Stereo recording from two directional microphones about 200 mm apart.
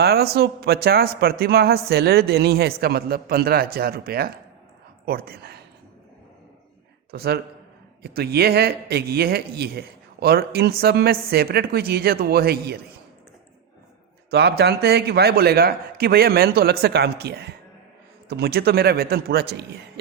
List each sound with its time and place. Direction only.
0.0 s a man's voice: 55° right (ahead or behind)
7.1 s a man's voice: 50° right (ahead or behind)
14.3 s a man's voice: 55° right (ahead or behind)